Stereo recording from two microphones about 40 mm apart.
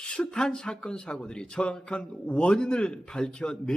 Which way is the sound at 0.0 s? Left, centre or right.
Centre.